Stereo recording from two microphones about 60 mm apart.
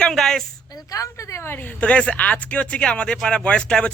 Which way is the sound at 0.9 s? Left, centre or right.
Left.